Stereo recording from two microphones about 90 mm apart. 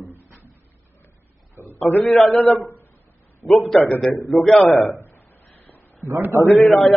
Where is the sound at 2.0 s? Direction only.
Centre (ahead or behind).